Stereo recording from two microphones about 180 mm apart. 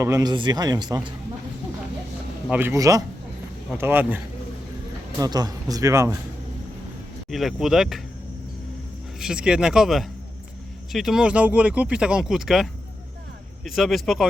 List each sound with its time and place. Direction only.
0.0 s speech: 20° right (ahead or behind)
2.5 s a man's voice: 10° right (ahead or behind)
5.2 s speech: 20° right (ahead or behind)
7.3 s speech: centre (ahead or behind)
9.2 s speech: 5° right (ahead or behind)
13.7 s speech: centre (ahead or behind)